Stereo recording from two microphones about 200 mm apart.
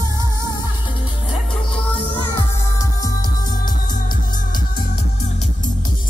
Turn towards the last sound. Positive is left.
turn(degrees=45)  # may be behind; listen again after turning